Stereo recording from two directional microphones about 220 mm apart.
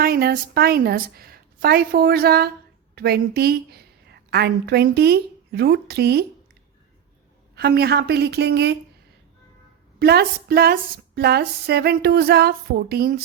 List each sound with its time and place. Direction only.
0.0 s a woman's voice: 45° right (ahead or behind)
7.5 s speech: 45° right (ahead or behind)
10.0 s speech: 45° right (ahead or behind)